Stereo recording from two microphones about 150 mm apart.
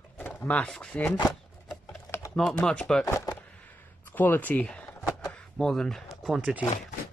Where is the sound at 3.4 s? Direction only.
10° left (ahead or behind).